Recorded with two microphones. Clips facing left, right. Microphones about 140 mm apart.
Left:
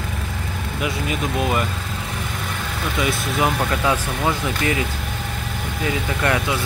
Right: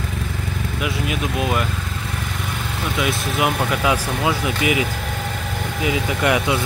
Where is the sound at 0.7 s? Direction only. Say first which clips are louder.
Even; centre (ahead or behind).